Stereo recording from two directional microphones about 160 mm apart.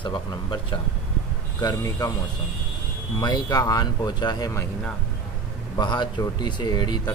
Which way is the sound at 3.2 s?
25° left (ahead or behind).